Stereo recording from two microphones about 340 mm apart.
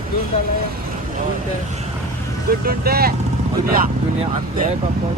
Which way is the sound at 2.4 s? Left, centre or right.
Right.